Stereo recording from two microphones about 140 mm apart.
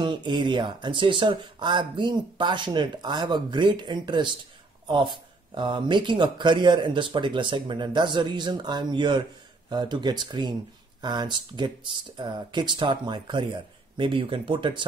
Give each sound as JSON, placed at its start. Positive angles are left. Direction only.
{"t": 0.0, "sound": "speech", "side_deg": -35}